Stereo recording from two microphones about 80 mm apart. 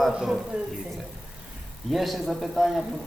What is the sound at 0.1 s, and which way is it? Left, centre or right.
Speech, centre.